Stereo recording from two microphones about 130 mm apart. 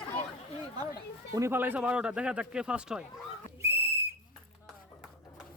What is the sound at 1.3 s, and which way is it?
Speech, 20° right (ahead or behind).